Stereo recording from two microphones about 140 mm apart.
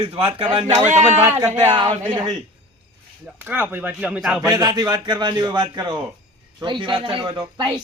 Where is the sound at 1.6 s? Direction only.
35° right (ahead or behind).